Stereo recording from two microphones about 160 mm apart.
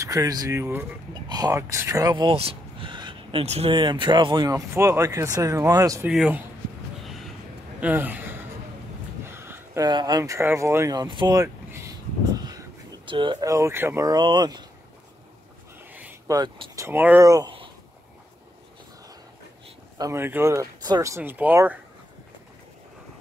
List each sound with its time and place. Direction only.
0.0 s speech: 20° right (ahead or behind)
2.3 s speech: 35° right (ahead or behind)
6.0 s speech: 10° right (ahead or behind)
7.8 s gasp: 10° right (ahead or behind)
9.2 s speech: 15° right (ahead or behind)
15.9 s a sound: 10° right (ahead or behind)
16.3 s speech: 25° right (ahead or behind)
16.8 s speech: 10° right (ahead or behind)
20.0 s speech: 15° right (ahead or behind)